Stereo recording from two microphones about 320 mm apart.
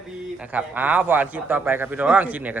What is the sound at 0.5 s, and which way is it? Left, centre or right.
A man's voice, centre.